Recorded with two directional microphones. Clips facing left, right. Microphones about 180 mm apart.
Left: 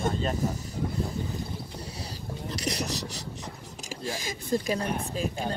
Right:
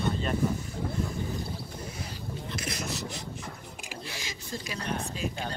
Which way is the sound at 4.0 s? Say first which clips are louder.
Left 11 dB; 45° left (ahead or behind).